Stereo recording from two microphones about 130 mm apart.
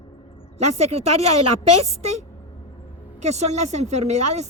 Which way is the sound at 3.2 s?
60° right (ahead or behind).